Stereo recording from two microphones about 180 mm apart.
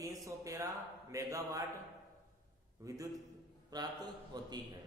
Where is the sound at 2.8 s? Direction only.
20° right (ahead or behind).